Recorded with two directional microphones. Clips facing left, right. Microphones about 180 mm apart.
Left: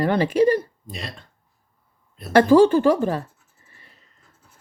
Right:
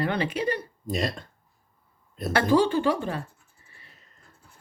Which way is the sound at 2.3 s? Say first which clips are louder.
Left 8 dB; 45° left (ahead or behind).